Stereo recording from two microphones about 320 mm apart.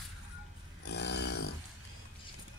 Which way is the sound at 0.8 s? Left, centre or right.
Left.